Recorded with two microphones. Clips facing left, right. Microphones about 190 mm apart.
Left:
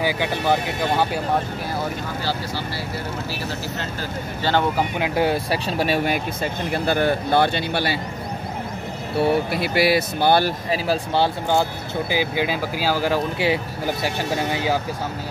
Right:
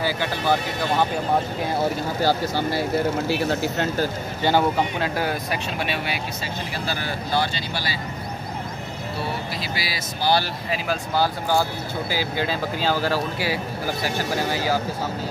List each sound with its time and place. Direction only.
0.0 s speech: 15° left (ahead or behind)
2.2 s speech: 50° right (ahead or behind)
4.4 s speech: 15° right (ahead or behind)
4.7 s speech: 10° left (ahead or behind)
5.1 s speech: 25° left (ahead or behind); by 8.0 s 60° left (ahead or behind)
9.2 s speech: 60° left (ahead or behind)
10.7 s speech: 35° left (ahead or behind)
12.1 s speech: 15° left (ahead or behind)